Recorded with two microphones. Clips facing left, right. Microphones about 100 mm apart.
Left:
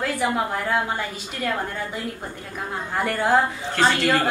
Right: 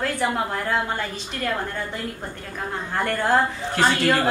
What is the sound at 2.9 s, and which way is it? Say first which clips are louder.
Speech: left 1 dB; 5° left (ahead or behind).